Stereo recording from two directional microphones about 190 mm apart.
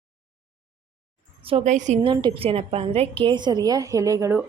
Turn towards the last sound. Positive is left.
turn(degrees=-15)  # may be behind; listen again after turning